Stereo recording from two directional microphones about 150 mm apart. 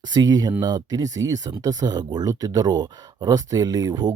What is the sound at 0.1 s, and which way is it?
Speech, 25° right (ahead or behind).